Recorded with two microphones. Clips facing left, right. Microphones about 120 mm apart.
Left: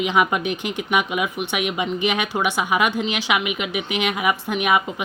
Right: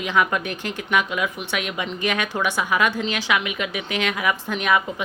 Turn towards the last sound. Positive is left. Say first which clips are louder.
# left 1 dB
turn(degrees=15)  # may be behind; listen again after turning